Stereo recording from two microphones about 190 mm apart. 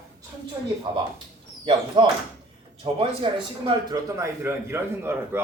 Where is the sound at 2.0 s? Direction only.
25° right (ahead or behind).